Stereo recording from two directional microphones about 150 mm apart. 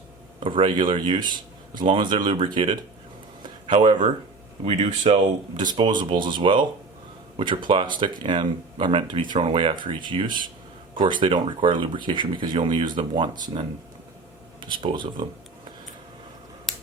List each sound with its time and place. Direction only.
0.3 s speech: 35° right (ahead or behind)
4.6 s speech: 45° right (ahead or behind)